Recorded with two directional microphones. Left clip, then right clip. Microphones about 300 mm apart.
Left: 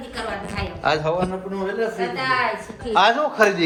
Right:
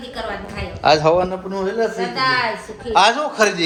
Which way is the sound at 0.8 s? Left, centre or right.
Centre.